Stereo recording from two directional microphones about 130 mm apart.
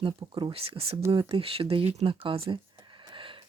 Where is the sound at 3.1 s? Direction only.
40° right (ahead or behind).